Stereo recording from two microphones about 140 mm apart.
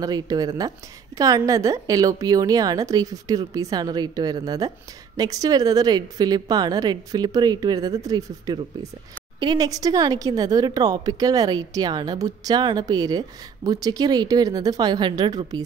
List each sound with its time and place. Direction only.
0.0 s a woman's voice: 25° right (ahead or behind)